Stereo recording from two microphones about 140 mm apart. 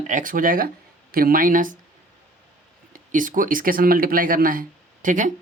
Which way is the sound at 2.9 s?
70° right (ahead or behind).